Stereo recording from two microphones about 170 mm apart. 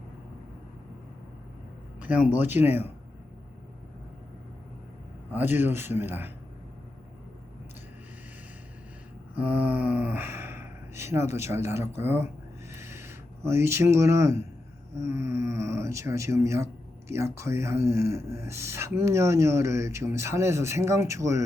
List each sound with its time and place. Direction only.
2.0 s speech: 10° right (ahead or behind)
5.3 s speech: 10° right (ahead or behind)
9.4 s speech: 10° right (ahead or behind)
12.7 s a sound: 15° right (ahead or behind)
14.9 s speech: 15° right (ahead or behind)